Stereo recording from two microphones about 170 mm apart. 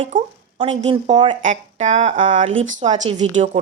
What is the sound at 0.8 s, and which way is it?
A woman's voice, 35° right (ahead or behind).